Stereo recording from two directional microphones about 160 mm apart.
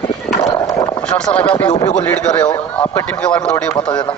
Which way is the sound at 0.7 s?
25° left (ahead or behind).